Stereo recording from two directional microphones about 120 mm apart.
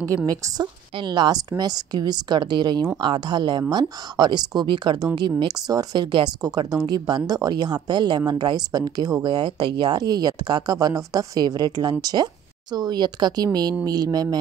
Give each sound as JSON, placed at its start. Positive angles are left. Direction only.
{"t": 0.3, "sound": "a woman's voice", "side_deg": -30}